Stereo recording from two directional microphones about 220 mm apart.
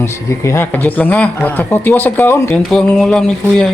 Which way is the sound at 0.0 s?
10° left (ahead or behind).